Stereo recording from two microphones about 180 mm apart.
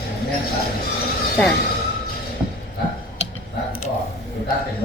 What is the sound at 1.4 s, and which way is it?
Speech, 5° left (ahead or behind).